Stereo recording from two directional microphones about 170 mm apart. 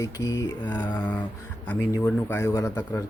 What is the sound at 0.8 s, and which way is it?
Speech, 10° left (ahead or behind).